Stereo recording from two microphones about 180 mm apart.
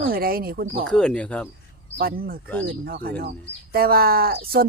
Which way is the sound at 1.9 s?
55° right (ahead or behind).